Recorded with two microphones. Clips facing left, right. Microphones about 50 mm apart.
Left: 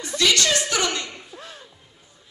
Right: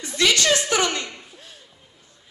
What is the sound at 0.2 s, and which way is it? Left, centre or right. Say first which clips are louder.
Speech: right 1 dB; right.